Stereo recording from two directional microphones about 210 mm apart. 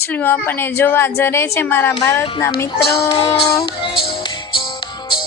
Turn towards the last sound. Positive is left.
turn(degrees=25)  # may be behind; listen again after turning